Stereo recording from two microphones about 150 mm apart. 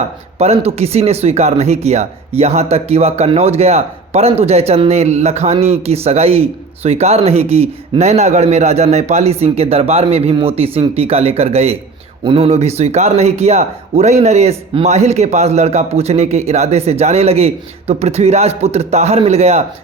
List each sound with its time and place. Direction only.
0.3 s speech: 45° right (ahead or behind)